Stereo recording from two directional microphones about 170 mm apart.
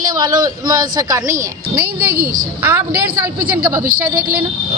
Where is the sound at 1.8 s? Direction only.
65° right (ahead or behind).